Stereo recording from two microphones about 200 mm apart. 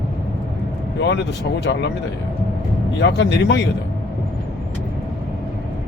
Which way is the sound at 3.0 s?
60° left (ahead or behind).